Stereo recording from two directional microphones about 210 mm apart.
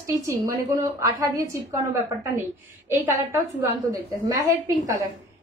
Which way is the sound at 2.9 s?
10° right (ahead or behind).